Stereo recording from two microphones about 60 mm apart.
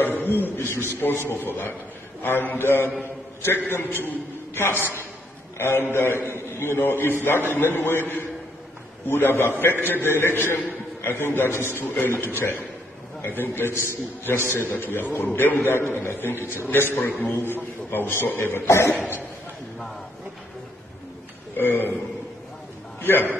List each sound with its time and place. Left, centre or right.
0.0 s a sound: left
0.9 s a man's voice: left
18.7 s a man's voice: left
21.5 s a man's voice: left
23.0 s a man's voice: left